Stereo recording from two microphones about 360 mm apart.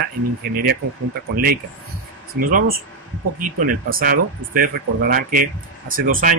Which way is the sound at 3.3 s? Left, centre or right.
Right.